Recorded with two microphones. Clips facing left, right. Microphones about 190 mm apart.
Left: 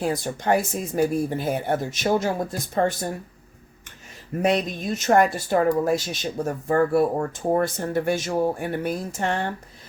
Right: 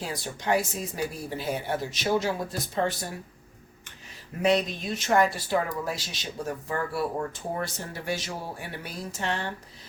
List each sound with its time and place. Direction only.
0.0 s speech: 50° left (ahead or behind)
4.4 s speech: 50° left (ahead or behind)